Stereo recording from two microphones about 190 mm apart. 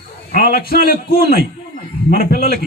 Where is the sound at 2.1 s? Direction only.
50° left (ahead or behind).